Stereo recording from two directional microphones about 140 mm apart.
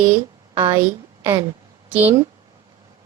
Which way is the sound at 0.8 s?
20° right (ahead or behind).